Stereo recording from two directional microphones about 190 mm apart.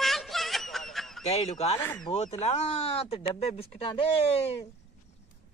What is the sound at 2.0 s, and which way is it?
Speech, 35° left (ahead or behind).